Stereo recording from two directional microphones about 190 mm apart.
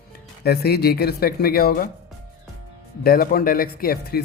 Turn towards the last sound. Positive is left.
turn(degrees=50)  # may be behind; listen again after turning